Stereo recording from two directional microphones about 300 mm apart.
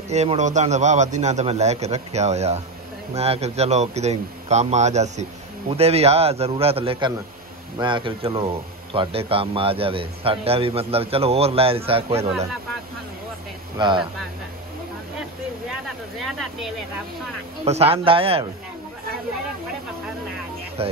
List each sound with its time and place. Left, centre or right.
0.1 s speech: right
13.7 s speech: centre
16.2 s speech: centre
17.6 s speech: centre
20.8 s speech: centre